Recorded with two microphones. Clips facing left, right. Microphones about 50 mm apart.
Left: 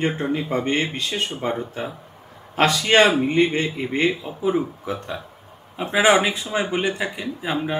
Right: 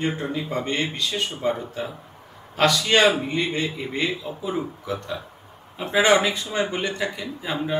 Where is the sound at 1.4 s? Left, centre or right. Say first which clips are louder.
Even; left.